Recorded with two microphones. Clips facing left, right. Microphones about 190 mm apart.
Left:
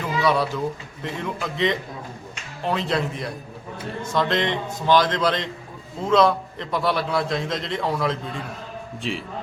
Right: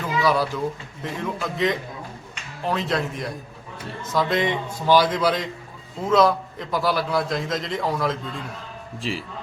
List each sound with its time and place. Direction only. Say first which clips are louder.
0.2 s a man's voice: even; centre (ahead or behind)